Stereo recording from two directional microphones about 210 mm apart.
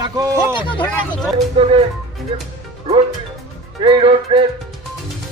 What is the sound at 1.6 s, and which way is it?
Speech, 25° right (ahead or behind).